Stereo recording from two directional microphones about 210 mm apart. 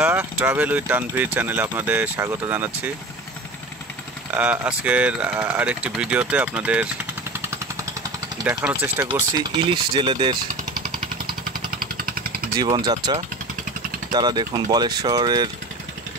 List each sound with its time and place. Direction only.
0.0 s speech: 10° right (ahead or behind)
4.3 s speech: 5° right (ahead or behind)
7.4 s vehicle: 15° right (ahead or behind)
8.6 s speech: 10° right (ahead or behind)
9.0 s speech: 20° right (ahead or behind)
12.6 s speech: 25° right (ahead or behind)